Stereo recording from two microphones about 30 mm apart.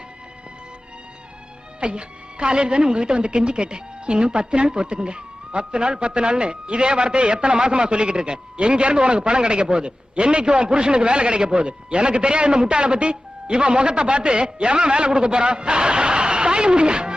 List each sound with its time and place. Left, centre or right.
1.8 s a woman's voice: right